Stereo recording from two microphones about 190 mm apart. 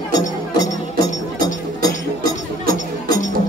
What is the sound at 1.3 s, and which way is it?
Music, 20° left (ahead or behind).